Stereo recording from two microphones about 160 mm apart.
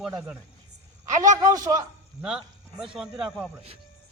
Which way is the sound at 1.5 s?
20° right (ahead or behind).